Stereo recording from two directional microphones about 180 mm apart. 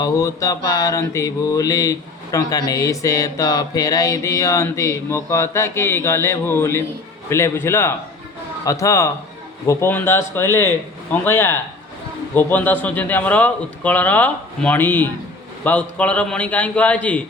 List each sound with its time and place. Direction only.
0.0 s mantra: 15° left (ahead or behind)